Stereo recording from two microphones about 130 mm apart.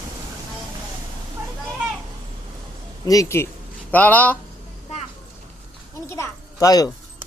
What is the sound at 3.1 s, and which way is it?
A man's voice, 25° left (ahead or behind).